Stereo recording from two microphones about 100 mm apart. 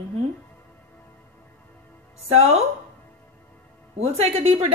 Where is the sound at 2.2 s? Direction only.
90° right.